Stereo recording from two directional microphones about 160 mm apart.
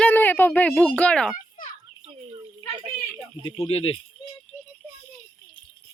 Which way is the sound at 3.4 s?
35° left (ahead or behind).